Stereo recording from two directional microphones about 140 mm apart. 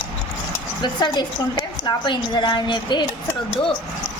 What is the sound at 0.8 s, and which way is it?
A woman's voice, 35° left (ahead or behind).